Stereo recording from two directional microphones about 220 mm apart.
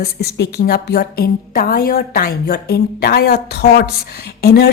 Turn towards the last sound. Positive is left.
turn(degrees=45)  # may be behind; listen again after turning